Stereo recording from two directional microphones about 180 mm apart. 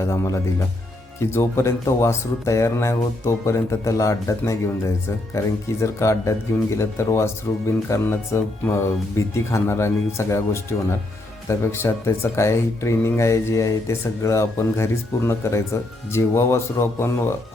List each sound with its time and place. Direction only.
0.0 s speech: 15° left (ahead or behind)